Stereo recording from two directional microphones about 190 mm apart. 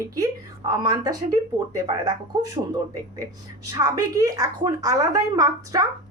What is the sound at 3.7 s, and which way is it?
A woman's voice, 20° right (ahead or behind).